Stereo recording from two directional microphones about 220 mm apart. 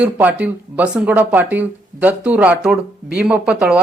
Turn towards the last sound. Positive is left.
turn(degrees=-5)  # may be behind; listen again after turning